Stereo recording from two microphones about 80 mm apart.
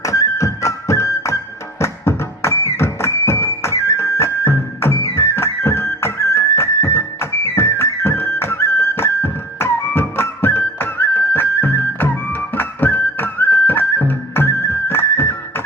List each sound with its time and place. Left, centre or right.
0.0 s music: left